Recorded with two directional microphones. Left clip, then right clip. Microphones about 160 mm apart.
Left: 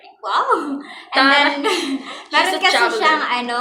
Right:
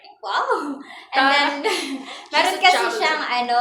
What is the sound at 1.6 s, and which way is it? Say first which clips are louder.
A woman's voice: left 3 dB; 10° right (ahead or behind).